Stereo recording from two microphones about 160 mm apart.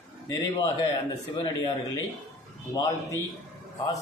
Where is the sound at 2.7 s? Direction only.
20° left (ahead or behind).